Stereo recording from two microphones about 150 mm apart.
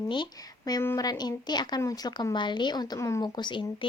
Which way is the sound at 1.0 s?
30° left (ahead or behind).